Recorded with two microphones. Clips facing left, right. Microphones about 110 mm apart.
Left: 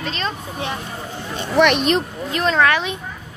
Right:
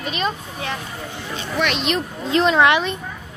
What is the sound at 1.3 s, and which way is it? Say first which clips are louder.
Speech: left 7 dB; 50° left (ahead or behind).